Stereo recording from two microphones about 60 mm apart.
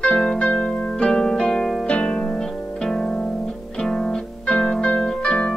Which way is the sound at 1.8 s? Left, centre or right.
Centre.